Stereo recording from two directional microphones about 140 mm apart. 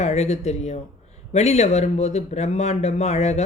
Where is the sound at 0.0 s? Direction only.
55° left (ahead or behind).